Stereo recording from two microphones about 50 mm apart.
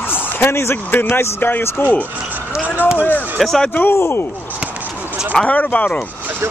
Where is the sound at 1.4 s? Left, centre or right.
Left.